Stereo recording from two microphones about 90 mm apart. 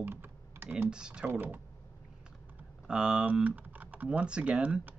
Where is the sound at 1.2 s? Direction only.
20° right (ahead or behind).